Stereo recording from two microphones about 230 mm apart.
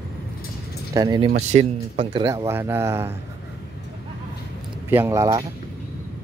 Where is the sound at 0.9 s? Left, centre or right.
Centre.